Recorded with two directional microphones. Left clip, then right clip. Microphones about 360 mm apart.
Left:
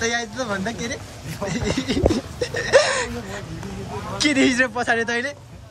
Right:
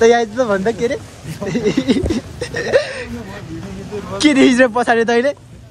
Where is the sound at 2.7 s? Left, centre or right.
Centre.